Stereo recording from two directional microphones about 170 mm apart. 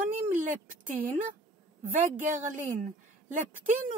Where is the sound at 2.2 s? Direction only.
45° right (ahead or behind).